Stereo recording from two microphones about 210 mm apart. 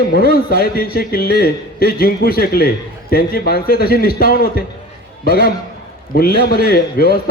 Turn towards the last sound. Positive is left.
turn(degrees=45)  # may be behind; listen again after turning